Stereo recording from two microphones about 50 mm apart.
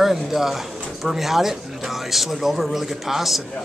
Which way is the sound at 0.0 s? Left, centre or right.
Centre.